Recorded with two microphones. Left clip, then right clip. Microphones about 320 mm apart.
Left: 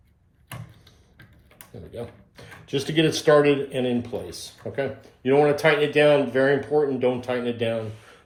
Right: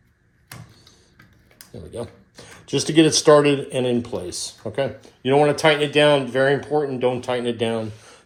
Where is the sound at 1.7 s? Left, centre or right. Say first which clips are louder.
Right 4 dB; centre.